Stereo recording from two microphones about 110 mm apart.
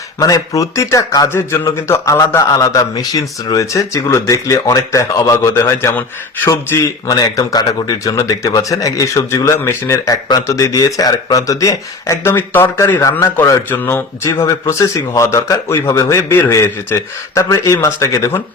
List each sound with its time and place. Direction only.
0.2 s a man's voice: 30° left (ahead or behind)
6.5 s a man's voice: 35° left (ahead or behind)